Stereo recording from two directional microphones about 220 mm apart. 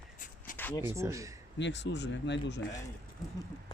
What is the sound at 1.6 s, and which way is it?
Speech, 55° left (ahead or behind).